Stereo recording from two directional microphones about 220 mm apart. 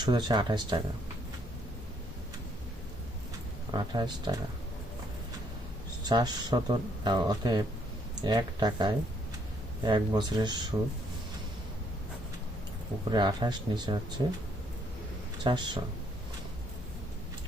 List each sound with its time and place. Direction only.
0.0 s speech: 20° right (ahead or behind)
3.7 s speech: 20° right (ahead or behind)
6.1 s speech: 20° right (ahead or behind)
13.1 s speech: 20° right (ahead or behind)
15.4 s speech: 20° right (ahead or behind)